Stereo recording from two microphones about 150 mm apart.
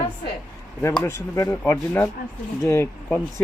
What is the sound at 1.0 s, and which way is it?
Speech, 20° left (ahead or behind).